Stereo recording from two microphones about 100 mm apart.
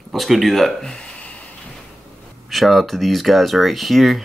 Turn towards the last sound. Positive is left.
turn(degrees=0)  # may be behind; listen again after turning